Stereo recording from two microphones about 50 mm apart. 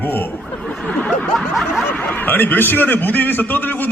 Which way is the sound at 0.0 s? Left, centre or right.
Left.